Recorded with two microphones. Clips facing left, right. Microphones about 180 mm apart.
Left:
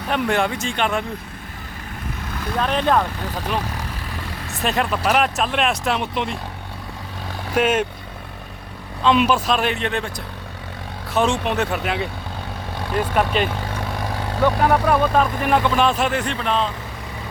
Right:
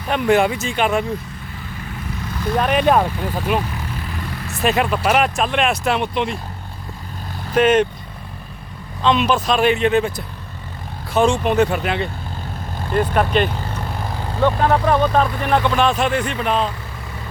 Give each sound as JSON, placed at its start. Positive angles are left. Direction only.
{"t": 0.1, "sound": "speech", "side_deg": -5}
{"t": 2.6, "sound": "speech", "side_deg": -10}
{"t": 4.6, "sound": "speech", "side_deg": -5}
{"t": 7.5, "sound": "speech", "side_deg": 5}
{"t": 9.0, "sound": "speech", "side_deg": 5}
{"t": 13.1, "sound": "speech", "side_deg": 5}
{"t": 13.7, "sound": "vehicle", "side_deg": 90}
{"t": 14.6, "sound": "speech", "side_deg": 5}